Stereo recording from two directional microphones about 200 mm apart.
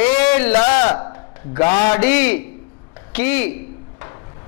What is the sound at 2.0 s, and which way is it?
A man's voice, 10° left (ahead or behind).